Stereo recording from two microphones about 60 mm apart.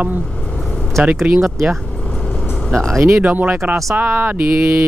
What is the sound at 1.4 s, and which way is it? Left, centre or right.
Speech, centre.